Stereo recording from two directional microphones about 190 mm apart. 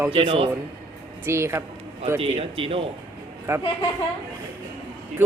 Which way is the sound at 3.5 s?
15° right (ahead or behind).